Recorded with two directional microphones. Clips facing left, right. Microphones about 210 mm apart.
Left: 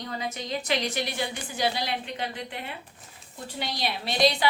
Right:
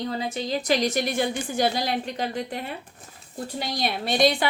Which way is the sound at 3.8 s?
50° right (ahead or behind).